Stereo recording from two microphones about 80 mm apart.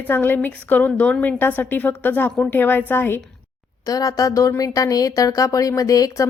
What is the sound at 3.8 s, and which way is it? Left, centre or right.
A woman's voice, left.